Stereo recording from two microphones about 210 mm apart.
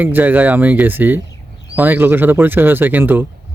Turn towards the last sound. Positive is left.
turn(degrees=-10)  # may be behind; listen again after turning